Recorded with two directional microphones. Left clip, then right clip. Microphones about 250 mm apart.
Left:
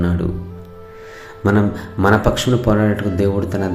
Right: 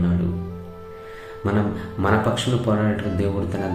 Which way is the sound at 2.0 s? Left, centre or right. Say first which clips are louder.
Left 6 dB; left.